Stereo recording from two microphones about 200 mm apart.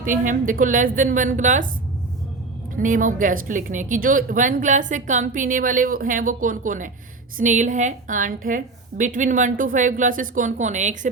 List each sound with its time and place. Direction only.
0.0 s a woman's voice: 40° right (ahead or behind)
2.7 s a woman's voice: 40° right (ahead or behind)